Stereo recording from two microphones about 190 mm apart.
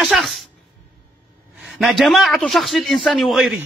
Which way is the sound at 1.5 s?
Centre (ahead or behind).